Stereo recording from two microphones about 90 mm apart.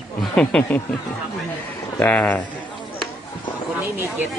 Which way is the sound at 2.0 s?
15° left (ahead or behind).